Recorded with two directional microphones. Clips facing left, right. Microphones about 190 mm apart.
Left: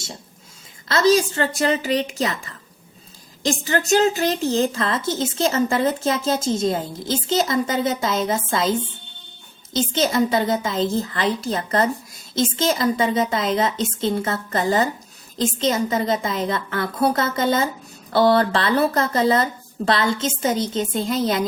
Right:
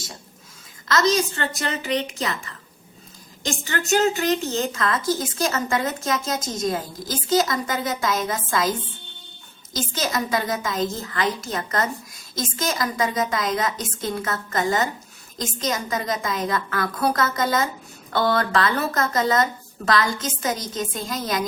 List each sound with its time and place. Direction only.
0.9 s a woman's voice: 30° left (ahead or behind)